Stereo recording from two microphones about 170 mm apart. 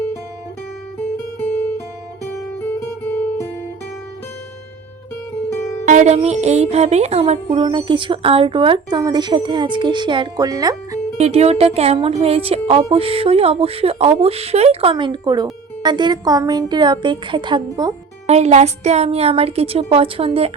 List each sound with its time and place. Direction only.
5.8 s music: 45° right (ahead or behind); by 11.0 s 20° right (ahead or behind)
11.2 s speech: 40° right (ahead or behind)
15.8 s music: 25° right (ahead or behind)
18.3 s speech: 40° right (ahead or behind)